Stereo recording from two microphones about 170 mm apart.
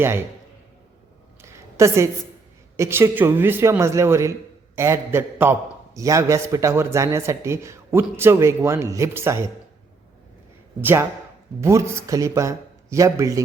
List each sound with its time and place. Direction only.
1.4 s a sound: 15° right (ahead or behind)
2.7 s a man's voice: 15° right (ahead or behind)
10.8 s a man's voice: 10° right (ahead or behind)